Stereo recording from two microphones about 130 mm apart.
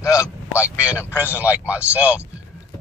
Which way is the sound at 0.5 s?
10° right (ahead or behind).